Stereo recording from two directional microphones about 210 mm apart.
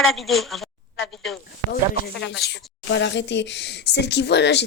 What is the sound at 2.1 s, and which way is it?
A woman's voice, 60° left (ahead or behind).